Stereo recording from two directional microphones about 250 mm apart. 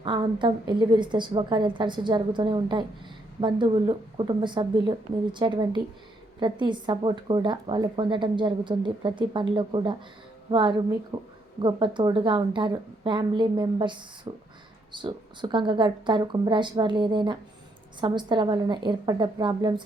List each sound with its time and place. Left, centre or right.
0.0 s a woman's voice: centre